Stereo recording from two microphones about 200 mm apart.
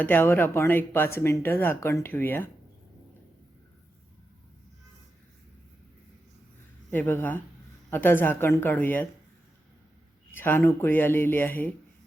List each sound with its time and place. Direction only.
0.0 s speech: 10° left (ahead or behind)
6.9 s speech: 10° left (ahead or behind)
10.3 s speech: 10° left (ahead or behind)